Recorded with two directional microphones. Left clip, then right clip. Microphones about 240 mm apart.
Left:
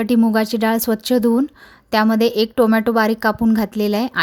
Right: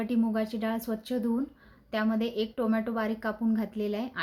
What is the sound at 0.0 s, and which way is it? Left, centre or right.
A woman's voice, left.